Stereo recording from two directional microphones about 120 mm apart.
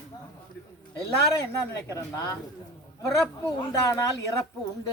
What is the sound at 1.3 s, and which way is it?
Speech, 25° left (ahead or behind).